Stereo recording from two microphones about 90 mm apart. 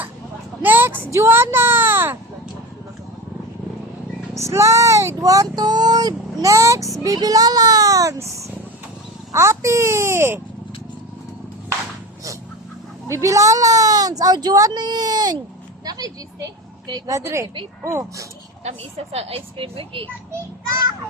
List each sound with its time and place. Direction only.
0.6 s a sound: 20° right (ahead or behind)
4.4 s speech: 35° right (ahead or behind)
13.1 s speech: 35° right (ahead or behind)
15.8 s vehicle: 45° right (ahead or behind)
17.1 s speech: 30° right (ahead or behind)
19.3 s speech: 90° right